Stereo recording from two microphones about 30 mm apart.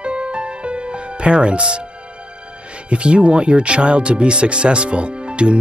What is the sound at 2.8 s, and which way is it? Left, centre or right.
Speech, right.